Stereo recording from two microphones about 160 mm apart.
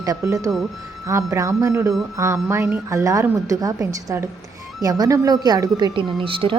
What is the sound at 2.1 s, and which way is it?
Music, 20° right (ahead or behind).